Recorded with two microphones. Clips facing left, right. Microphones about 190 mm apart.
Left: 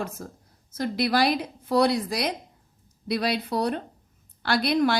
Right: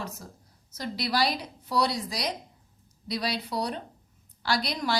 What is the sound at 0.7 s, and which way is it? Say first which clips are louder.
A woman's voice: left 6 dB; 55° left (ahead or behind).